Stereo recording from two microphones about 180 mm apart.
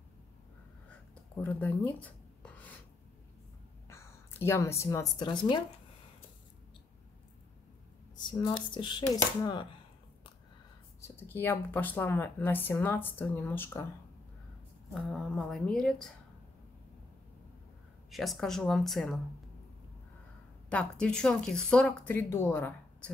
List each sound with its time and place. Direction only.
0.8 s rub: 10° left (ahead or behind)
3.9 s speech: 15° left (ahead or behind)
8.2 s speech: 25° left (ahead or behind)
11.0 s speech: 10° left (ahead or behind)
15.0 s speech: centre (ahead or behind)
18.1 s speech: centre (ahead or behind)
20.7 s speech: 5° left (ahead or behind)